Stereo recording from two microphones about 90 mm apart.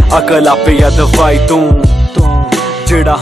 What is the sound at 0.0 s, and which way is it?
Music, centre (ahead or behind).